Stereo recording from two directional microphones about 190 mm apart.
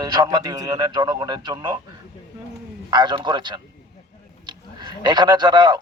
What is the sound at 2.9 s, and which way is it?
A man's voice, 20° right (ahead or behind).